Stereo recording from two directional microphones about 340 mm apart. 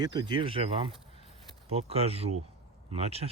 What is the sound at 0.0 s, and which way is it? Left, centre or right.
Speech, centre.